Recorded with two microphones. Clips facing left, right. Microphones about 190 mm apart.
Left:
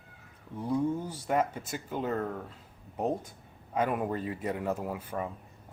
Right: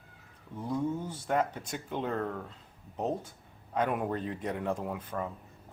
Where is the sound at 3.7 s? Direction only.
5° left (ahead or behind).